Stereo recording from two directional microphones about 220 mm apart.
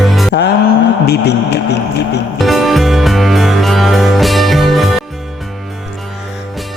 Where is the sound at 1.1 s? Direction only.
50° left (ahead or behind).